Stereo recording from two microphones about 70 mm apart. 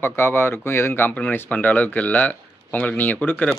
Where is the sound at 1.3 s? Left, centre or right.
Left.